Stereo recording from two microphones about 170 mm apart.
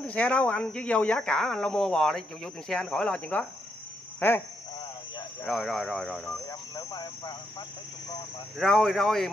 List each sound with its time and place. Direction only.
0.0 s speech: 5° left (ahead or behind)
4.2 s insect: 10° left (ahead or behind)
5.4 s speech: centre (ahead or behind)
6.4 s speech: 20° left (ahead or behind)
8.5 s speech: centre (ahead or behind)